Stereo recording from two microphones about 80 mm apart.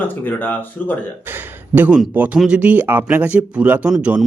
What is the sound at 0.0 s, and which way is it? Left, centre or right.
Speech, left.